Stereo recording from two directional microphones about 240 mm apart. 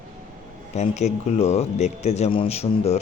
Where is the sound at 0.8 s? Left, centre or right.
Left.